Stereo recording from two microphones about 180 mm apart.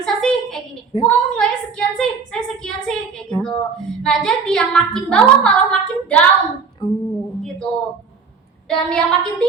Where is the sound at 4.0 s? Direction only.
5° left (ahead or behind).